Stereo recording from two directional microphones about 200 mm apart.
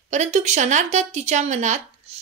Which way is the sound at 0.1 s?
35° right (ahead or behind).